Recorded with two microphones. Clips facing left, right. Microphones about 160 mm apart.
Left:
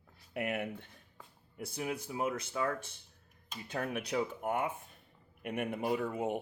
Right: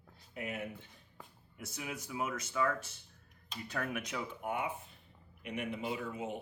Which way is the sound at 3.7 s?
30° left (ahead or behind).